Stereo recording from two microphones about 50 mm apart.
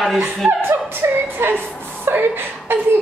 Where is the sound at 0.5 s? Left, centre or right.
Right.